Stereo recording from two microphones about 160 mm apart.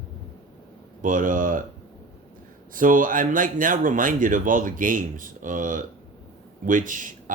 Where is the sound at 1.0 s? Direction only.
55° right (ahead or behind).